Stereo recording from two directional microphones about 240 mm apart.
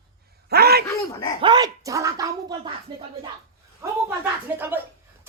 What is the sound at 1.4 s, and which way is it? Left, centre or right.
Speech, centre.